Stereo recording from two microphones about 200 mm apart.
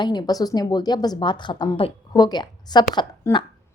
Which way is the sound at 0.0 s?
20° left (ahead or behind).